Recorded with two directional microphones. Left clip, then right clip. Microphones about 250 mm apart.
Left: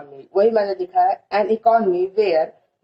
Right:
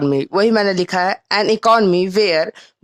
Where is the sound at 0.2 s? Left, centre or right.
Right.